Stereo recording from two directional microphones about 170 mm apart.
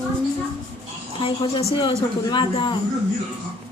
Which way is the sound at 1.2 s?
30° left (ahead or behind).